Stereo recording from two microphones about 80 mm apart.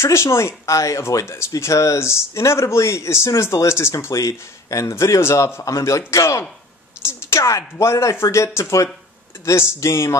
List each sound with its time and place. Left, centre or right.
0.0 s a woman's voice: left